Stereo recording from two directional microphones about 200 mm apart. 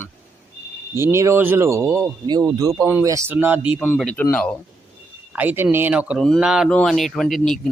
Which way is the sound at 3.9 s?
5° left (ahead or behind).